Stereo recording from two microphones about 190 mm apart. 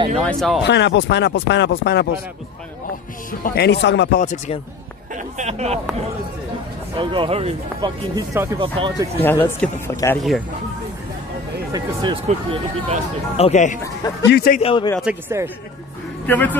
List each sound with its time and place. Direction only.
0.2 s speech: centre (ahead or behind)
0.7 s speech: 65° left (ahead or behind)
3.3 s speech: 50° left (ahead or behind)
4.2 s speech: 40° left (ahead or behind)
5.1 s speech: 35° right (ahead or behind)
8.2 s speech: 20° right (ahead or behind)
9.2 s a man's voice: 10° left (ahead or behind)
11.7 s speech: 25° right (ahead or behind)
12.3 s speech: 35° right (ahead or behind)
13.4 s speech: 40° left (ahead or behind)
14.2 s speech: 55° left (ahead or behind)
14.6 s a man's voice: 30° left (ahead or behind)
15.0 s speech: 5° right (ahead or behind)
16.3 s a man's voice: 10° left (ahead or behind)